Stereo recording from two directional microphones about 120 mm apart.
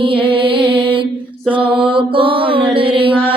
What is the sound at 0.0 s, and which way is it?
Music, 45° right (ahead or behind).